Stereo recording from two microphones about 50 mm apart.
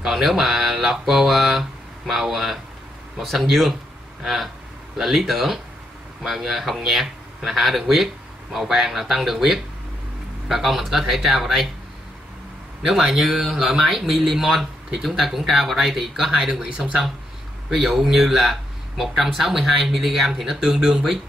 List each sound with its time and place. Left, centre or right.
0.0 s a sound: centre
3.2 s speech: centre
12.8 s speech: centre
17.6 s speech: centre